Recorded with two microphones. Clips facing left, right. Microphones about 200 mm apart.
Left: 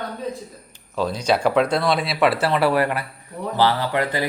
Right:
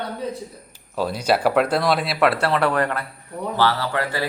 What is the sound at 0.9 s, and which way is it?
Speech, 10° right (ahead or behind).